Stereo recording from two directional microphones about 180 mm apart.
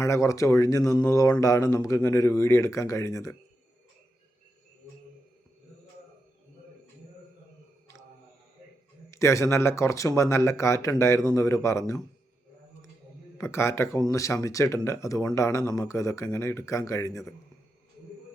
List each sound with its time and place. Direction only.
0.0 s speech: 15° left (ahead or behind)
9.0 s speech: 15° left (ahead or behind)
13.4 s speech: 15° left (ahead or behind)